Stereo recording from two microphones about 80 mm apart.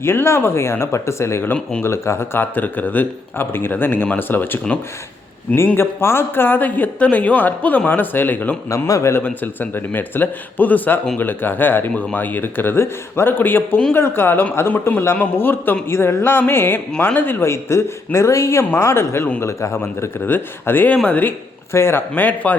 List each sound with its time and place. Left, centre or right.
0.0 s a man's voice: left
8.7 s speech: left
9.2 s a man's voice: left
21.7 s a man's voice: left